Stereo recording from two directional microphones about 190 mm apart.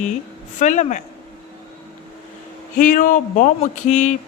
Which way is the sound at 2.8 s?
45° left (ahead or behind).